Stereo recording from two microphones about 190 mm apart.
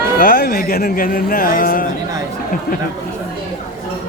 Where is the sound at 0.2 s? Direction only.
50° left (ahead or behind).